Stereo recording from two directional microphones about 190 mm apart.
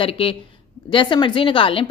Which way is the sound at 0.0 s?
30° left (ahead or behind).